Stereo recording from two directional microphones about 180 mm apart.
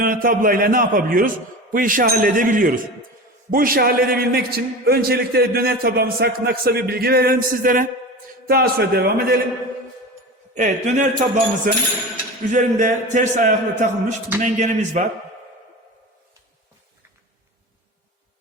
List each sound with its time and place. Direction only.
0.0 s a man's voice: 50° right (ahead or behind)
10.6 s a man's voice: 40° right (ahead or behind)